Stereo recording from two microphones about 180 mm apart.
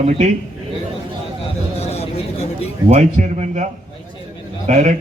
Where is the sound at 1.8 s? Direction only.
35° left (ahead or behind).